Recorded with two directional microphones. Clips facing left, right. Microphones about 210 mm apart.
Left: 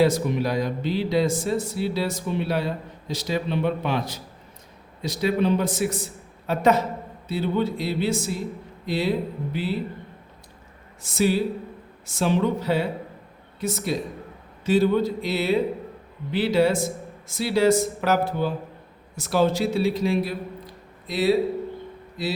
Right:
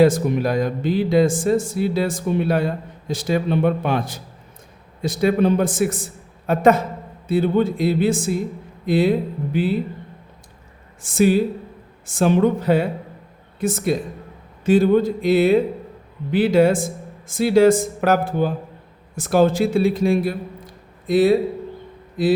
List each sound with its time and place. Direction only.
0.0 s speech: 50° right (ahead or behind)
11.0 s a man's voice: 50° right (ahead or behind)